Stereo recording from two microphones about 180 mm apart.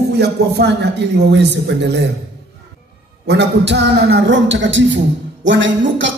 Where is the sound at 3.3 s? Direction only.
75° right (ahead or behind); by 6.1 s 90° right.